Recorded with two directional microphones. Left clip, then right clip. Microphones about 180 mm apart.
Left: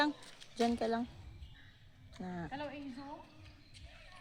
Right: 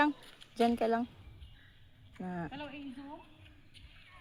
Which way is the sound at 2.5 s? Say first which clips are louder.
Left 2 dB; 20° left (ahead or behind).